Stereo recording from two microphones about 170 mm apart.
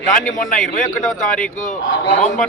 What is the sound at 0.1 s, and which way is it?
Speech, 50° left (ahead or behind).